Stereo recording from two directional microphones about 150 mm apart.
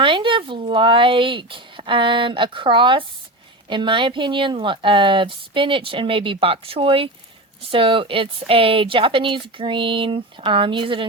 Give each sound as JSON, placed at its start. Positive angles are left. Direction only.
{"t": 0.0, "sound": "speech", "side_deg": -35}